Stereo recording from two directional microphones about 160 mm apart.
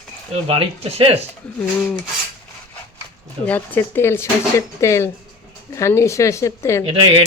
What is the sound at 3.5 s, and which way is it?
Speech, 10° left (ahead or behind).